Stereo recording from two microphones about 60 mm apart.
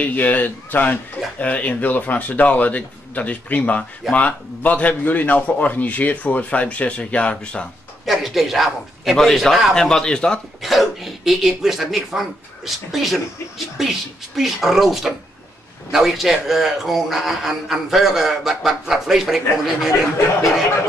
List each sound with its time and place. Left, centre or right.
0.0 s a man's voice: left
8.0 s a man's voice: centre
9.8 s speech: centre
10.6 s a man's voice: centre